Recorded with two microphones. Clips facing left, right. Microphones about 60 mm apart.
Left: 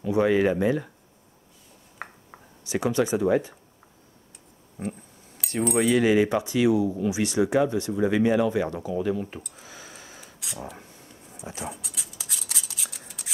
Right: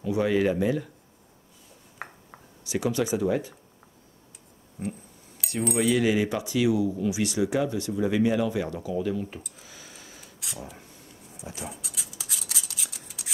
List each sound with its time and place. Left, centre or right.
0.1 s speech: left
2.0 s a sound: centre
2.6 s speech: left
5.4 s speech: centre
5.9 s speech: left
9.7 s tick: centre
10.2 s a sound: centre
11.5 s scissors: centre